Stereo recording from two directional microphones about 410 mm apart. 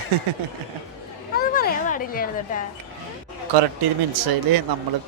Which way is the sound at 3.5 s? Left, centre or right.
Right.